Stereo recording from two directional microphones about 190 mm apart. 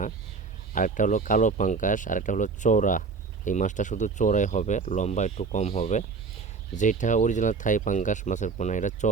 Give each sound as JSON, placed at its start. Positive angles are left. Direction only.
{"t": 0.7, "sound": "speech", "side_deg": 45}